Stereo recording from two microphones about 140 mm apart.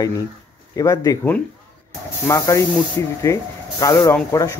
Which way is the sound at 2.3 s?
20° left (ahead or behind).